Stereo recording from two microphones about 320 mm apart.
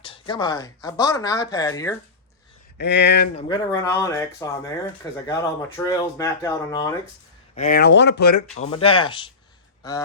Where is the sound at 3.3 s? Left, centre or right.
Centre.